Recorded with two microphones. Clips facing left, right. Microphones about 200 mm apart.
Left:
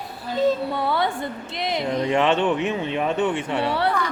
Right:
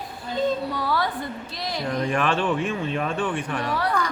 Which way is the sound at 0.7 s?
25° left (ahead or behind).